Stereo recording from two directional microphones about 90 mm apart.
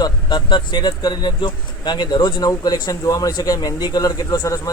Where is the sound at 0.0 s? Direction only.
55° left (ahead or behind).